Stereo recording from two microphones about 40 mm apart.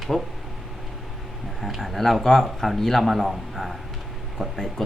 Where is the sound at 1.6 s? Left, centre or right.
Centre.